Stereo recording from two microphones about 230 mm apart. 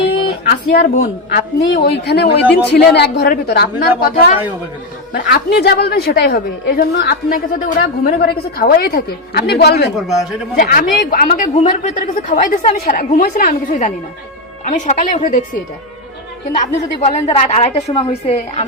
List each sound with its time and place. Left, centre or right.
0.0 s speech: left
1.6 s a woman's voice: left